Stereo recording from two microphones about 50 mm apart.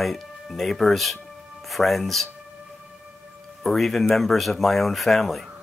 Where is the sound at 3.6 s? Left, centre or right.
Centre.